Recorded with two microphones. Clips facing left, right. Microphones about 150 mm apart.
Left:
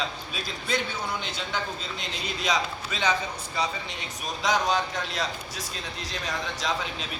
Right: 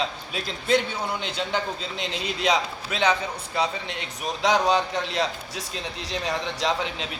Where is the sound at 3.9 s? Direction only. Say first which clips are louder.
Right 4 dB; 65° right (ahead or behind).